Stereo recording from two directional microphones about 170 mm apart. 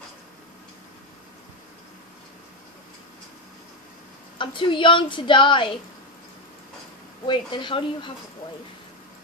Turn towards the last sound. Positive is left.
turn(degrees=30)  # may be behind; listen again after turning